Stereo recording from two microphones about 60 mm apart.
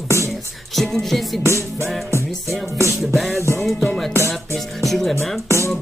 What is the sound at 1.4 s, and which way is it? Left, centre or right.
Music, right.